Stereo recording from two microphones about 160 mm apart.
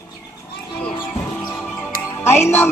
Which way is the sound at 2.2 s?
15° left (ahead or behind).